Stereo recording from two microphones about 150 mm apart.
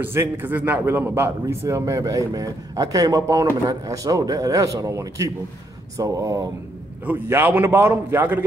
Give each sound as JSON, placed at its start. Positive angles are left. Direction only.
{"t": 0.0, "sound": "a man's voice", "side_deg": -15}